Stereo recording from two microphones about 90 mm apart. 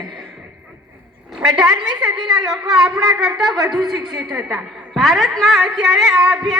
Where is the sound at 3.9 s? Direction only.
45° right (ahead or behind).